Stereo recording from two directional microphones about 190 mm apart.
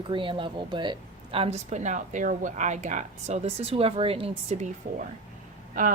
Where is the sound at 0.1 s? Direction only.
25° right (ahead or behind).